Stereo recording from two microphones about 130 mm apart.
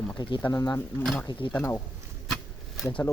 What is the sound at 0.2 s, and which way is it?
Speech, 35° left (ahead or behind).